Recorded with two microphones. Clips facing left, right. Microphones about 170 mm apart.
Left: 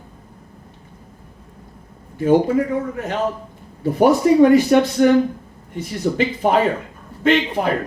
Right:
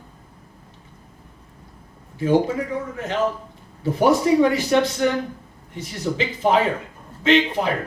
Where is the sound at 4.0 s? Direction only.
55° left (ahead or behind).